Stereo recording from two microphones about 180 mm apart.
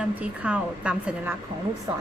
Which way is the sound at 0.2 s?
5° right (ahead or behind).